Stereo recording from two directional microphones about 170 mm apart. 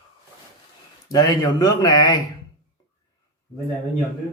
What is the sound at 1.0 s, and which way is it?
Speech, 20° left (ahead or behind).